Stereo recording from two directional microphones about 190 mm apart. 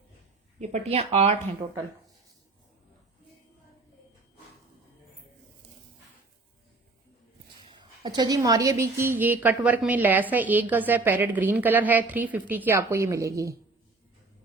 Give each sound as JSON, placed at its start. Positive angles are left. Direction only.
{"t": 0.6, "sound": "speech", "side_deg": -35}
{"t": 7.7, "sound": "a woman's voice", "side_deg": -20}